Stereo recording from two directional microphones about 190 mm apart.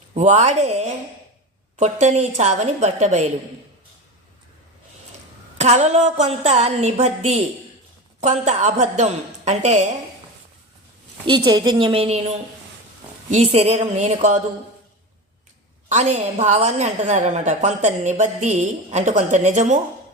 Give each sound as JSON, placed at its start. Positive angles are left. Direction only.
{"t": 0.1, "sound": "a woman's voice", "side_deg": -35}
{"t": 5.5, "sound": "a woman's voice", "side_deg": -35}
{"t": 11.3, "sound": "a woman's voice", "side_deg": -20}
{"t": 13.3, "sound": "a woman's voice", "side_deg": -35}
{"t": 15.9, "sound": "a woman's voice", "side_deg": -35}